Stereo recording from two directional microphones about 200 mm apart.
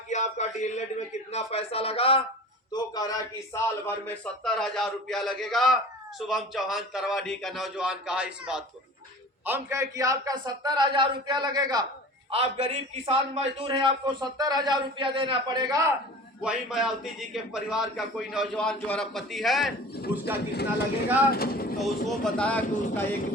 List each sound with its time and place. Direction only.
0.1 s a sound: 35° left (ahead or behind)
1.3 s a man's voice: 30° left (ahead or behind); by 15.9 s 20° right (ahead or behind)
16.4 s speech: 5° right (ahead or behind)
20.1 s speech: 10° right (ahead or behind)
20.5 s speech: 55° left (ahead or behind)
22.2 s speech: 5° left (ahead or behind)